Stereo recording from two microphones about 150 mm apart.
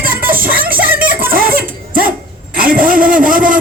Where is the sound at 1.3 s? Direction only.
75° right (ahead or behind).